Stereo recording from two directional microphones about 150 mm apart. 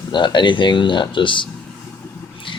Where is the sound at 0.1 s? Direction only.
30° left (ahead or behind).